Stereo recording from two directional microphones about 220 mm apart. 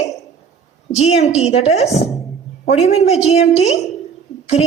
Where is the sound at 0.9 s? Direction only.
30° left (ahead or behind).